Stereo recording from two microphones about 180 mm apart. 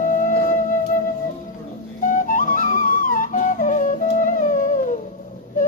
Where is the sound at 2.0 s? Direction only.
50° left (ahead or behind).